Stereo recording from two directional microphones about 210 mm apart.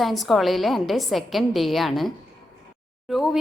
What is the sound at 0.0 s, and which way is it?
A woman's voice, centre (ahead or behind).